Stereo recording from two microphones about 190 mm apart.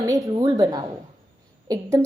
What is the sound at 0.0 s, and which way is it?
A woman's voice, 20° right (ahead or behind).